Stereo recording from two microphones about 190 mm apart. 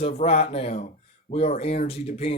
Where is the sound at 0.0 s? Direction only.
35° left (ahead or behind).